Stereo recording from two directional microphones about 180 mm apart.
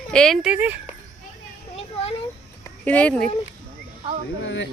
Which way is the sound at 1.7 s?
35° left (ahead or behind).